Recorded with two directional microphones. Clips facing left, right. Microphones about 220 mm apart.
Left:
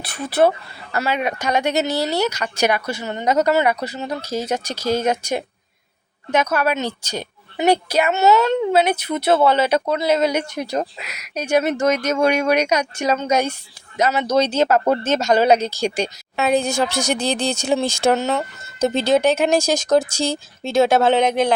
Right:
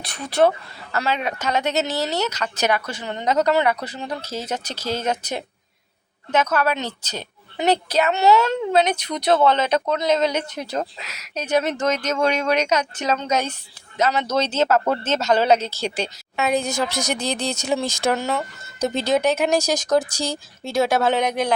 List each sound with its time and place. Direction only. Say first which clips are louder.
0.3 s a woman's voice: left 1 dB; 5° left (ahead or behind)
16.3 s speech: left 3 dB; 30° left (ahead or behind)